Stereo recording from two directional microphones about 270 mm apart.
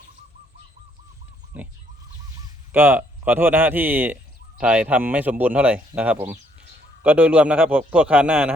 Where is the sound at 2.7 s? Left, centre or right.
Centre.